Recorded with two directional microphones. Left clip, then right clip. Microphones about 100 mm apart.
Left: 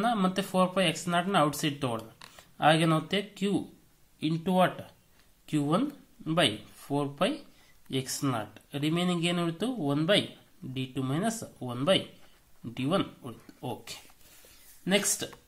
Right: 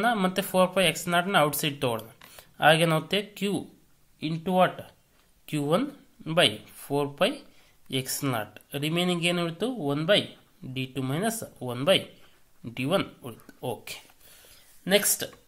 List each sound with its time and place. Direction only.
0.0 s speech: 30° right (ahead or behind)
4.2 s speech: 5° right (ahead or behind)
5.5 s speech: 25° right (ahead or behind)
9.4 s speech: 15° right (ahead or behind)
10.7 s speech: 25° right (ahead or behind)
14.8 s speech: 45° right (ahead or behind)